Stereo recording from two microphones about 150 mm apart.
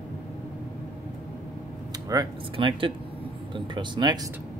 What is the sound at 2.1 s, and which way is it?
Speech, 30° right (ahead or behind).